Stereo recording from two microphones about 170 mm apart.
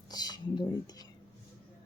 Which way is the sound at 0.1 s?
25° left (ahead or behind).